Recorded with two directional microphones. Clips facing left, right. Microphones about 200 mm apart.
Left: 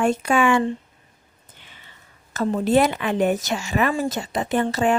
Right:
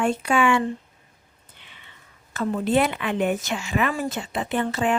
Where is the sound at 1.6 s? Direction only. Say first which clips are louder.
Left 1 dB; 40° left (ahead or behind).